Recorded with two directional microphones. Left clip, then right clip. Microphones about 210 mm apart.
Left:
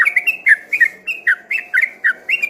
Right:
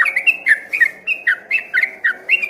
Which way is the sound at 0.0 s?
10° right (ahead or behind).